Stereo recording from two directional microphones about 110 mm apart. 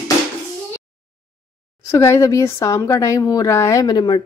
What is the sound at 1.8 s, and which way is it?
Speech, 25° left (ahead or behind).